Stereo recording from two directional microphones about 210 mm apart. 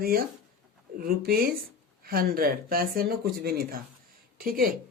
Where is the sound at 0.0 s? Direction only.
45° right (ahead or behind).